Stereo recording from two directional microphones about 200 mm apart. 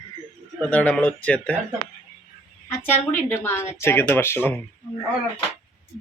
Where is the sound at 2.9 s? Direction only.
35° left (ahead or behind).